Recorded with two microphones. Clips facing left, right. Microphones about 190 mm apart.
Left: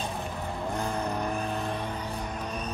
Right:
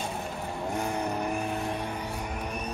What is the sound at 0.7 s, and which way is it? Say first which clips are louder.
Vehicle: right 1 dB; 15° right (ahead or behind).